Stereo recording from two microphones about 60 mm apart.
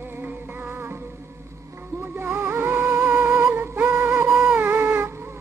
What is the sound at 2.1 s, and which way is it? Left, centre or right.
Music, right.